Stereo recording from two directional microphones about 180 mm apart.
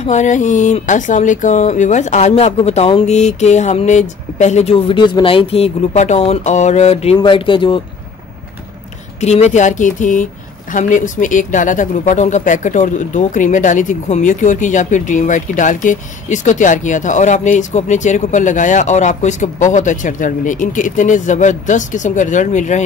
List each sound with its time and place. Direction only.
0.0 s speech: 40° left (ahead or behind)
9.2 s speech: 40° left (ahead or behind)